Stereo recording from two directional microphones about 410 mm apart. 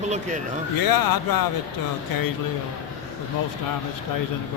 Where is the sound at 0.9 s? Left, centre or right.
Left.